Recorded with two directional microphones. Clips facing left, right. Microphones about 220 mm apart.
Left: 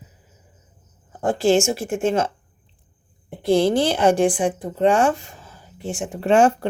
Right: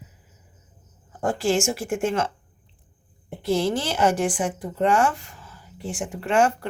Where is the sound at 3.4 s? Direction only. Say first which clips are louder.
Left 6 dB; 30° left (ahead or behind).